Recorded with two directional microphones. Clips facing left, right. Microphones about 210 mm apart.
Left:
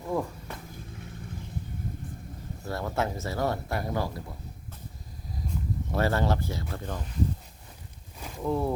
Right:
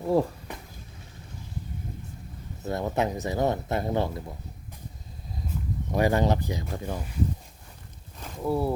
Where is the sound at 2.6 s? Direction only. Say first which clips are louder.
Right 3 dB; 20° right (ahead or behind).